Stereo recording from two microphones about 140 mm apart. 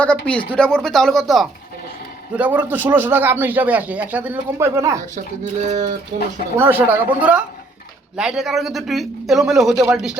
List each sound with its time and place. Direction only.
0.0 s speech: 10° left (ahead or behind)
2.3 s speech: 10° right (ahead or behind)
5.1 s speech: 60° right (ahead or behind)
6.6 s speech: 15° right (ahead or behind)